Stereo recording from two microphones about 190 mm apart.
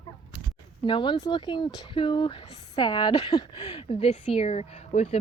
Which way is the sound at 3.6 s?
35° left (ahead or behind).